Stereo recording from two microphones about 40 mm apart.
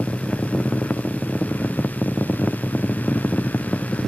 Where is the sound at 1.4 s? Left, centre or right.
Left.